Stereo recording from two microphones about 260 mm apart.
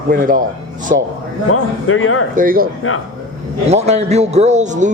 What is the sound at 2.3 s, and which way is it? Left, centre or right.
Speech, right.